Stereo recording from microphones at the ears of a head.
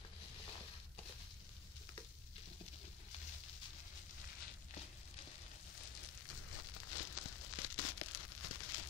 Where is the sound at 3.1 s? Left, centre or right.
Left.